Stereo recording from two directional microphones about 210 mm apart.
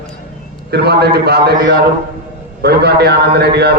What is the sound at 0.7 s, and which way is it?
A man's voice, 50° right (ahead or behind).